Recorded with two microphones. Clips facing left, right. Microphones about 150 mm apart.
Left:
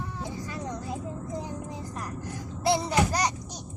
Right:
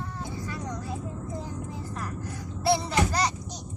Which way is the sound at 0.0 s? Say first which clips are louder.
Even; 20° left (ahead or behind).